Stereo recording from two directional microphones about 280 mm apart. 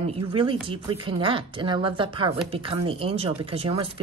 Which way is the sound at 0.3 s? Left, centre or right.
Centre.